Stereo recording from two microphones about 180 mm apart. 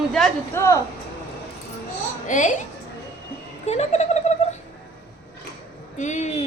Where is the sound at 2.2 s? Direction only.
45° left (ahead or behind).